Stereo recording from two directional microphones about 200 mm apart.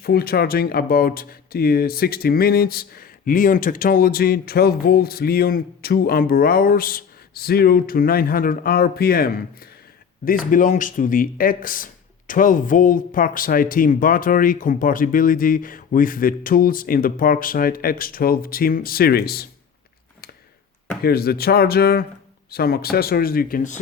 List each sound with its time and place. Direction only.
0.0 s speech: 50° left (ahead or behind)
21.0 s speech: 50° left (ahead or behind)